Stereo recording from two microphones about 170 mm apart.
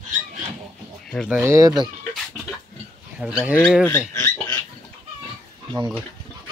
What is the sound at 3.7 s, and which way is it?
Speech, 10° left (ahead or behind).